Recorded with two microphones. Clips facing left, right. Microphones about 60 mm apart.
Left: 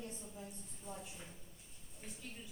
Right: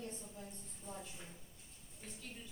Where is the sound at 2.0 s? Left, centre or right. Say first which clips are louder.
Left 1 dB; centre.